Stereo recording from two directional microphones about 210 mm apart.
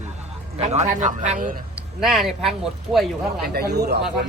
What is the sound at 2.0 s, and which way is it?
Speech, centre (ahead or behind).